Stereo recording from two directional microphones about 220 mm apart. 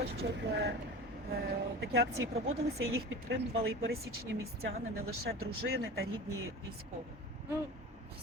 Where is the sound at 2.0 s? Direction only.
65° right (ahead or behind).